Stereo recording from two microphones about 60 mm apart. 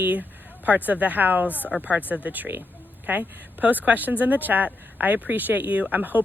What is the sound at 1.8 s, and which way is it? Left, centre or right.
Speech, right.